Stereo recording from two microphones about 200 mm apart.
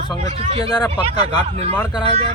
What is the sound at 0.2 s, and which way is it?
Speech, 30° right (ahead or behind).